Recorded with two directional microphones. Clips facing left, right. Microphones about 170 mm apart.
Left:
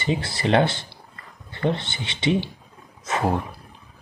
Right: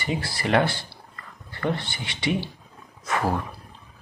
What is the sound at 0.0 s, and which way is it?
Speech, 25° left (ahead or behind).